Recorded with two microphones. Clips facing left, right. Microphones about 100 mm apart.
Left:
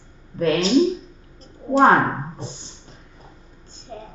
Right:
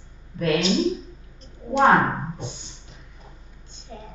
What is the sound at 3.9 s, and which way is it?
Speech, 40° left (ahead or behind).